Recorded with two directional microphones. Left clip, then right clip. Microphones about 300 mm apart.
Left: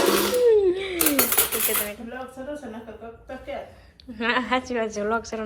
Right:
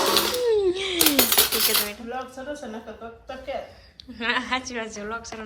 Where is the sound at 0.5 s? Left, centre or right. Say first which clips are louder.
Left 3 dB; right.